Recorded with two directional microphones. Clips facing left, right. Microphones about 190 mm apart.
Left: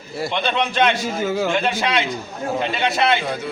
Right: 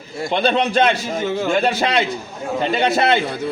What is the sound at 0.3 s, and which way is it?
Speech, 40° right (ahead or behind).